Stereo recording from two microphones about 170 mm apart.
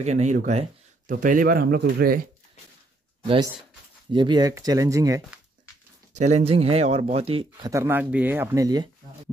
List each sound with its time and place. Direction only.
0.0 s speech: 40° right (ahead or behind); by 2.1 s 65° right (ahead or behind)
4.1 s speech: 25° right (ahead or behind)
6.1 s speech: 40° right (ahead or behind)
7.7 s speech: 15° right (ahead or behind)